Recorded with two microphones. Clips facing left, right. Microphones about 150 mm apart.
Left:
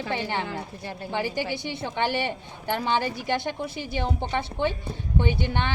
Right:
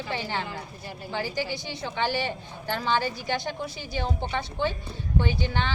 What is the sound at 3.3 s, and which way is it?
Speech, 55° left (ahead or behind).